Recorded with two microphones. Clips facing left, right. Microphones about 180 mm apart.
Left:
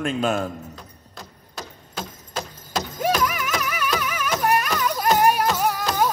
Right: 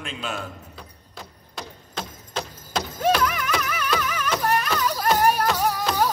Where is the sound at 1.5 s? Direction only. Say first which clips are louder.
Even; 5° left (ahead or behind).